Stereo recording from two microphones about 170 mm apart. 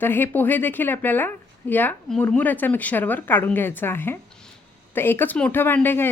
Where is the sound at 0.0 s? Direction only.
10° left (ahead or behind).